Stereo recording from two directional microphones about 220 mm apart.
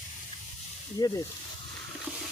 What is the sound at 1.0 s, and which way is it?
Speech, 20° left (ahead or behind).